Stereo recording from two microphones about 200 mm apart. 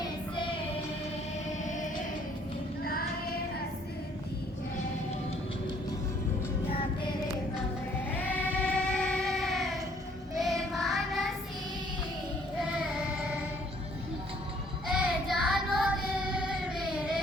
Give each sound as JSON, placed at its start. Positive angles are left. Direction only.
{"t": 0.0, "sound": "child singing", "side_deg": 25}
{"t": 1.6, "sound": "music", "side_deg": 40}
{"t": 2.8, "sound": "child singing", "side_deg": 50}
{"t": 8.1, "sound": "child singing", "side_deg": 10}
{"t": 14.8, "sound": "child singing", "side_deg": -5}